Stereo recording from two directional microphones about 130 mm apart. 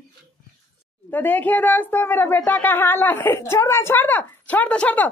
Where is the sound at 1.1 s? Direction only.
15° left (ahead or behind).